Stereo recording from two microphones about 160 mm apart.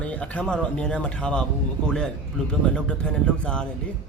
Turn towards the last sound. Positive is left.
turn(degrees=5)  # may be behind; listen again after turning